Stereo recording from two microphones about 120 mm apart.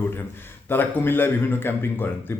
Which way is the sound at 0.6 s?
15° left (ahead or behind).